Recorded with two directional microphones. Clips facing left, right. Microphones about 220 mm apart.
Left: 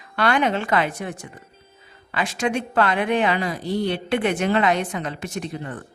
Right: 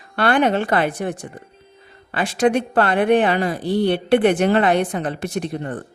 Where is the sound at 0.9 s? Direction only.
35° right (ahead or behind).